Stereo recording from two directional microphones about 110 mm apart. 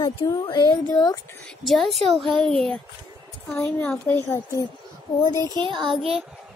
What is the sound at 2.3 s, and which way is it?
Child singing, 50° right (ahead or behind).